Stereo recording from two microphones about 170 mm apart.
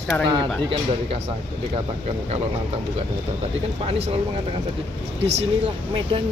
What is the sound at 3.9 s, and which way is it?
Speech, 40° right (ahead or behind).